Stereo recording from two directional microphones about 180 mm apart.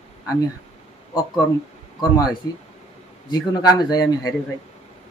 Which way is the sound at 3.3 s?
25° left (ahead or behind).